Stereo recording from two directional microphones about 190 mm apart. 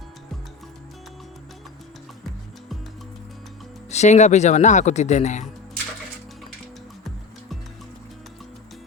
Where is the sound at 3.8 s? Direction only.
35° left (ahead or behind).